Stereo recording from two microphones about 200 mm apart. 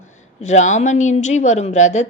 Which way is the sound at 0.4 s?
35° left (ahead or behind).